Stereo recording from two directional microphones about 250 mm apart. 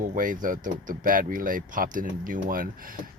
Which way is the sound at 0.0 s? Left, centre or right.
Right.